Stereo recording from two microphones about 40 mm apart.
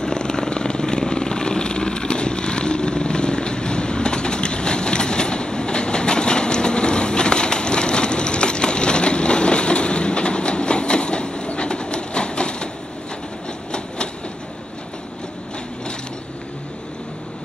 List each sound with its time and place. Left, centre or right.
0.0 s vehicle: centre
13.7 s train: left